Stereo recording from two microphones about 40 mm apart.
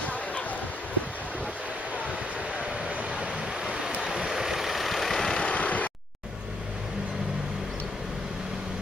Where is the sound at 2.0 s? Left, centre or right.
Right.